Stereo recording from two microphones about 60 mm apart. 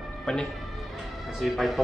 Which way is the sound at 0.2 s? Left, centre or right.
Centre.